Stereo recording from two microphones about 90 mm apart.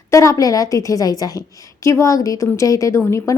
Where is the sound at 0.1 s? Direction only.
35° left (ahead or behind).